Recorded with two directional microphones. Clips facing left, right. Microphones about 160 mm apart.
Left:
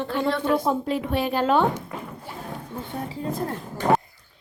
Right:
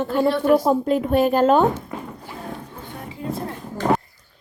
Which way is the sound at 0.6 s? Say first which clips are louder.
Right 5 dB; 45° right (ahead or behind).